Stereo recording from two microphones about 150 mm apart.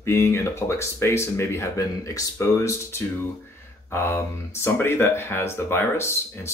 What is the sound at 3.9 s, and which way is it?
Speech, 15° left (ahead or behind).